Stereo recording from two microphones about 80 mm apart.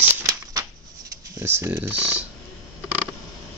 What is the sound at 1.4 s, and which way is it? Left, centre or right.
Speech, right.